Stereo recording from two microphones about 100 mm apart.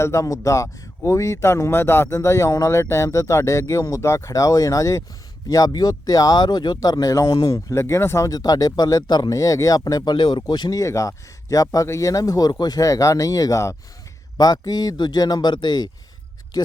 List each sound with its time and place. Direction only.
0.0 s a man's voice: 30° left (ahead or behind)
7.3 s a man's voice: 50° left (ahead or behind)
7.5 s a man's voice: 30° left (ahead or behind)
14.3 s a man's voice: 40° left (ahead or behind)